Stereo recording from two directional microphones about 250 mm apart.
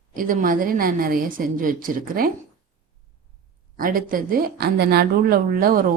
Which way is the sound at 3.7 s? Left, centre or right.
Right.